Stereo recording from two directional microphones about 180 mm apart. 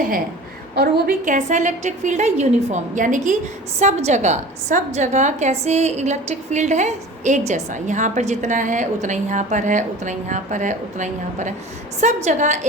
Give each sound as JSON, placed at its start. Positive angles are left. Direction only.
{"t": 0.8, "sound": "a woman's voice", "side_deg": -50}